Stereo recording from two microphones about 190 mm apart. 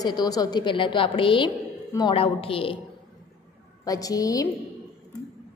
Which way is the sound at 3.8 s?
20° left (ahead or behind).